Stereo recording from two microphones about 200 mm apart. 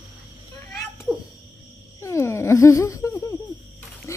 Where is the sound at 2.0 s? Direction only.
15° left (ahead or behind).